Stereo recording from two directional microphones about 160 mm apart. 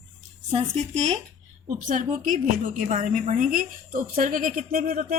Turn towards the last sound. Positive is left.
turn(degrees=-60)  # may be behind; listen again after turning